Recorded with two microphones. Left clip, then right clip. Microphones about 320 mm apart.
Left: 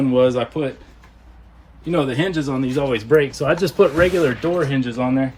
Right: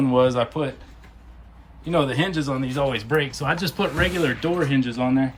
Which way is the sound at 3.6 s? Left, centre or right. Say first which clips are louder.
Left 11 dB; centre.